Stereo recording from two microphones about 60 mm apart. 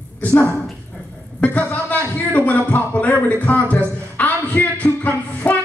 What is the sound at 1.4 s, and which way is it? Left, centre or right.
Music, left.